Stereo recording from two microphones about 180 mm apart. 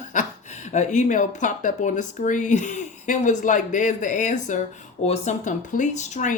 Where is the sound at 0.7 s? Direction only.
40° left (ahead or behind).